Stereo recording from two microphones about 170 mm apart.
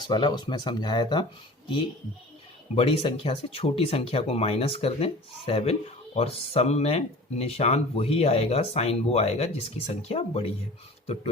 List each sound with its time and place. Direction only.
0.1 s speech: 25° left (ahead or behind)
2.7 s speech: 30° left (ahead or behind)